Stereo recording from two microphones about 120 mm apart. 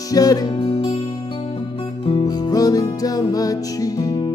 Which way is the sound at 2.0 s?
50° left (ahead or behind).